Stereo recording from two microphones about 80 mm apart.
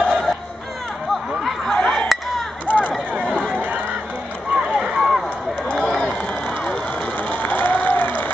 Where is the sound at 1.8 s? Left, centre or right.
Centre.